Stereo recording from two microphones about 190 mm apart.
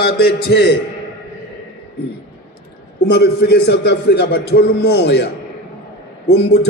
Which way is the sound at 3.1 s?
60° left (ahead or behind).